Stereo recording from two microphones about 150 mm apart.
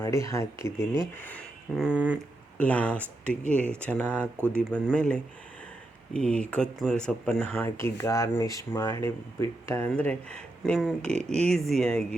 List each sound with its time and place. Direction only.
0.0 s speech: 20° left (ahead or behind)
1.7 s a sound: 5° right (ahead or behind)
2.6 s speech: 10° left (ahead or behind)